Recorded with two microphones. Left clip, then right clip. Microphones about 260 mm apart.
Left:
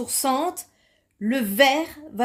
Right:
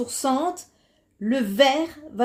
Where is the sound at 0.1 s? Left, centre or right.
Left.